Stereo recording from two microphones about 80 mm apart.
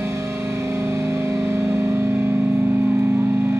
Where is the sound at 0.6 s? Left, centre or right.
Right.